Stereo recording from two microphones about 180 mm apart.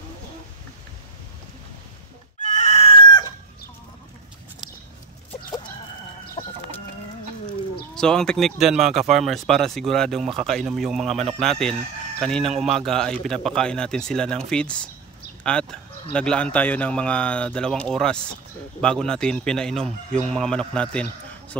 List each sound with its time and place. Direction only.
2.4 s chicken: 40° left (ahead or behind); by 3.3 s 25° left (ahead or behind)
6.4 s chicken: 30° left (ahead or behind)
7.9 s speech: 5° left (ahead or behind)